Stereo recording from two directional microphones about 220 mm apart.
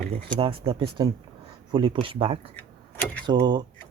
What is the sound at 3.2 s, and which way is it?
Speech, 20° right (ahead or behind).